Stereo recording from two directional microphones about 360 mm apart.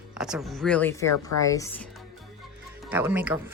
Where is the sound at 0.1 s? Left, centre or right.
Centre.